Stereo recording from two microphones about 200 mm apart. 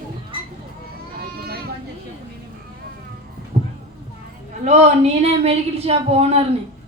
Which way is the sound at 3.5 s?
35° right (ahead or behind).